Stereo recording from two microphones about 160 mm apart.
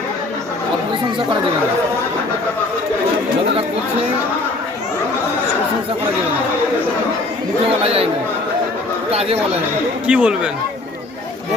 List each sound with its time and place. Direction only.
7.8 s speech: 35° right (ahead or behind)
10.1 s speech: 5° right (ahead or behind)